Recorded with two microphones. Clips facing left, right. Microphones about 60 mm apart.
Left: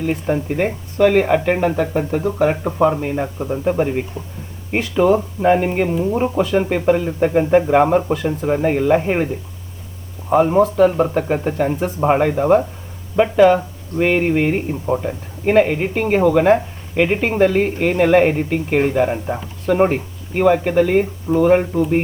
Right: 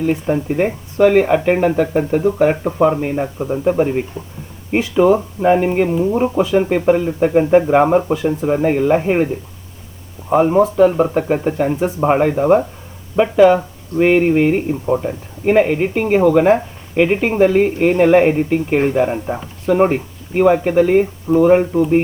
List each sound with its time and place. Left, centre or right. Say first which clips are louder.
0.0 s speech: right 2 dB; centre